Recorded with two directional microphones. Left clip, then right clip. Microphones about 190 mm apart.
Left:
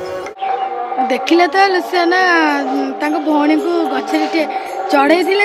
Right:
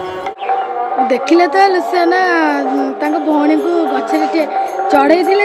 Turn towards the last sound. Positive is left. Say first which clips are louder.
# right 2 dB
turn(degrees=0)  # may be behind; listen again after turning